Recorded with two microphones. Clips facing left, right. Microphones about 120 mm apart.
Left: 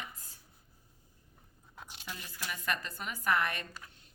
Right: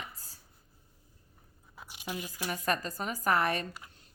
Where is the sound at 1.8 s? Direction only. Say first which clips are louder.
Even; 10° right (ahead or behind).